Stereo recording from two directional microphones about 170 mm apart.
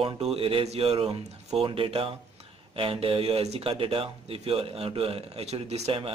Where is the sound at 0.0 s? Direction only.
35° right (ahead or behind).